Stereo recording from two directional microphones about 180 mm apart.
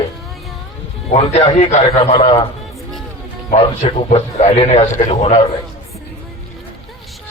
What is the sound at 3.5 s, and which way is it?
A man's voice, 35° left (ahead or behind).